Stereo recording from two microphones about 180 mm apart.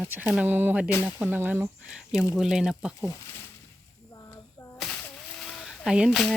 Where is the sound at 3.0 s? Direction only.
15° left (ahead or behind).